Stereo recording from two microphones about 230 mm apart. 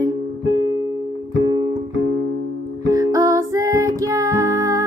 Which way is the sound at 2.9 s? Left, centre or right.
Centre.